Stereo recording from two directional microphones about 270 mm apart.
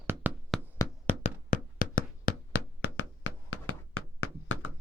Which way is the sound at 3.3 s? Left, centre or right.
Left.